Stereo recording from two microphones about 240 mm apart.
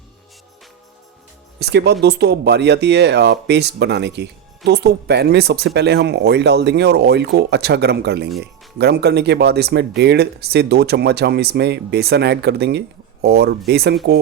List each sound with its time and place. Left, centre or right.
1.5 s speech: right